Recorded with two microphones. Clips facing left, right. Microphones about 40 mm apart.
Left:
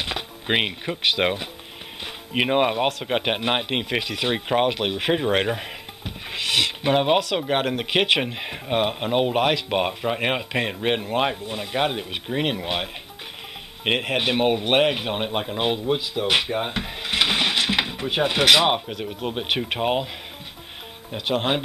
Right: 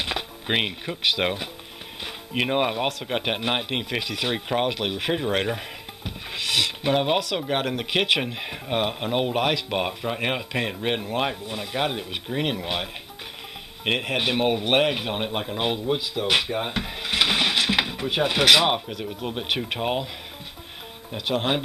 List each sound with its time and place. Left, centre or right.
0.0 s speech: centre
21.2 s speech: centre